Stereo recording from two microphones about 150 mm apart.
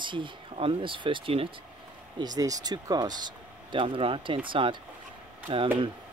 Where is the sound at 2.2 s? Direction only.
25° right (ahead or behind).